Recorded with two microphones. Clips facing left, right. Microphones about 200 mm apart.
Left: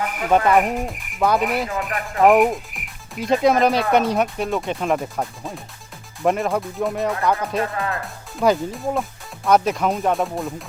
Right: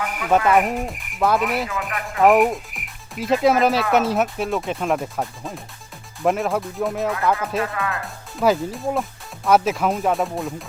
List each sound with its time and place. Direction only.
0.0 s music: 45° left (ahead or behind)
0.4 s speech: centre (ahead or behind)
1.9 s music: 45° left (ahead or behind)
2.2 s speech: centre (ahead or behind)
7.6 s speech: 35° left (ahead or behind)
8.0 s speech: centre (ahead or behind)